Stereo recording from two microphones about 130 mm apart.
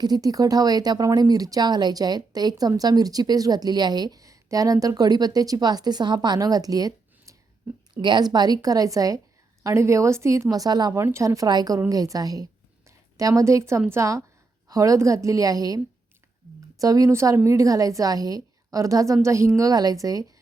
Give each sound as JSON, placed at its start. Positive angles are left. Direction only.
{"t": 0.0, "sound": "speech", "side_deg": -30}
{"t": 11.0, "sound": "speech", "side_deg": -20}
{"t": 16.8, "sound": "speech", "side_deg": -25}